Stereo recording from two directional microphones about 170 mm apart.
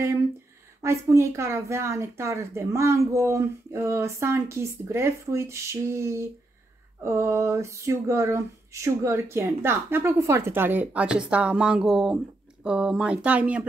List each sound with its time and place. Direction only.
0.8 s speech: 15° right (ahead or behind)